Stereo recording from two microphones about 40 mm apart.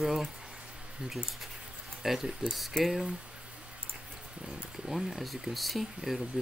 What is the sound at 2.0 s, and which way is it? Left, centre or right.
Speech, centre.